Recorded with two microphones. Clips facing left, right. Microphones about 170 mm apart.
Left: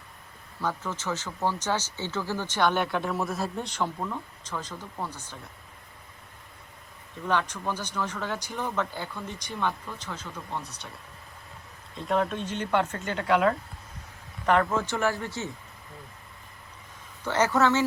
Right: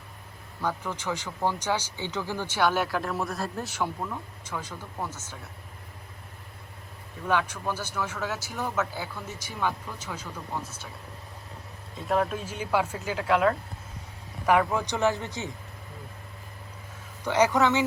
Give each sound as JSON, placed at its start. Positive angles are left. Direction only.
{"t": 0.6, "sound": "speech", "side_deg": -15}
{"t": 7.3, "sound": "speech", "side_deg": -10}
{"t": 11.9, "sound": "speech", "side_deg": 0}
{"t": 17.2, "sound": "speech", "side_deg": -15}